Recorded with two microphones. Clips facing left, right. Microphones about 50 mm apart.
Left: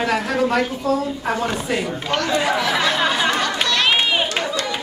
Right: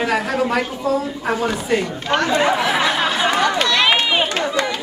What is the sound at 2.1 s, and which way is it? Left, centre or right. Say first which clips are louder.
Speech: right 3 dB; right.